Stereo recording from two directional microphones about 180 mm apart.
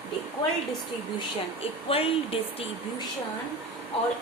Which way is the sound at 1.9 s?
30° left (ahead or behind).